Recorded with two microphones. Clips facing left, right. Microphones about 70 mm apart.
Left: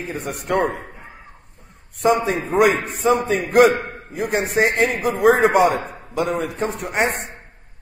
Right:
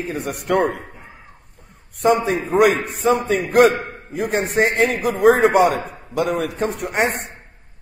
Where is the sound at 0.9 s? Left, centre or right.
Centre.